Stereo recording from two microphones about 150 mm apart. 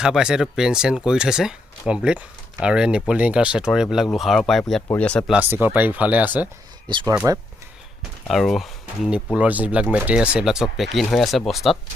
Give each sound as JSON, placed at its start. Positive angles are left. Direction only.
{"t": 0.0, "sound": "speech", "side_deg": -5}
{"t": 5.3, "sound": "speech", "side_deg": -10}
{"t": 8.3, "sound": "speech", "side_deg": 0}